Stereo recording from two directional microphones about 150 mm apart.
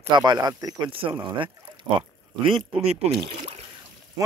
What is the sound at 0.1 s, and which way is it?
Speech, 30° right (ahead or behind).